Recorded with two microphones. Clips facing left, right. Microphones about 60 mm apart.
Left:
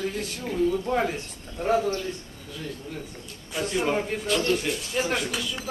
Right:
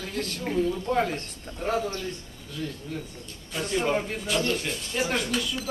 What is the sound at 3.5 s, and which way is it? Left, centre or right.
Speech, centre.